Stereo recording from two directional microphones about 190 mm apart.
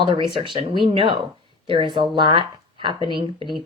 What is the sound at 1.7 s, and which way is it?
Speech, 25° right (ahead or behind).